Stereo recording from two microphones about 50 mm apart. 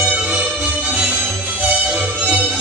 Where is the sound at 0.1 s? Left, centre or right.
Right.